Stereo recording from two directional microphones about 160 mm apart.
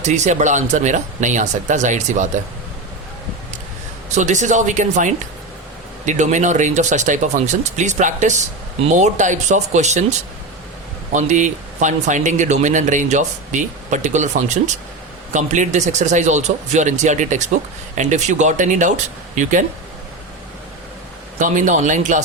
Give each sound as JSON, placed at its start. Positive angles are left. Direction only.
{"t": 0.0, "sound": "speech", "side_deg": -45}
{"t": 4.1, "sound": "speech", "side_deg": -50}
{"t": 21.3, "sound": "speech", "side_deg": -50}